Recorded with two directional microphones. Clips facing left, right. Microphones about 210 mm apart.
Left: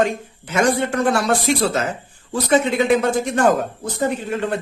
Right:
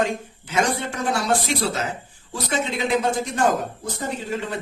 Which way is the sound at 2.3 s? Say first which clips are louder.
Left 8 dB; 60° left (ahead or behind).